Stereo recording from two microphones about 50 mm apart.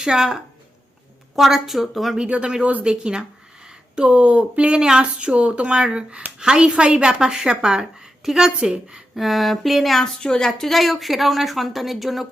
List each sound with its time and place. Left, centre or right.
0.0 s a woman's voice: centre
2.3 s a woman's voice: centre
9.1 s a woman's voice: centre
10.2 s a woman's voice: centre